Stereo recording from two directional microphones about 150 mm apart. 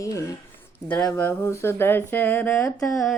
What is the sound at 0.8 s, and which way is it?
Speech, 10° left (ahead or behind).